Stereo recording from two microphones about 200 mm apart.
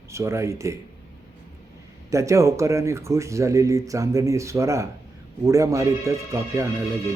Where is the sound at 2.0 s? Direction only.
15° right (ahead or behind).